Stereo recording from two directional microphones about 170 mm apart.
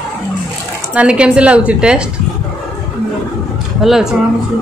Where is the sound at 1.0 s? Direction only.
5° right (ahead or behind).